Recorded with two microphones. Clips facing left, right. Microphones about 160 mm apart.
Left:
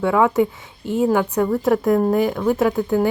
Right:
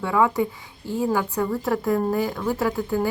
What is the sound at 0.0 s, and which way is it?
A woman's voice, 20° left (ahead or behind).